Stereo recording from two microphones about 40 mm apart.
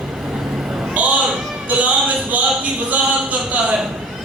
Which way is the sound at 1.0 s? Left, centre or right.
Right.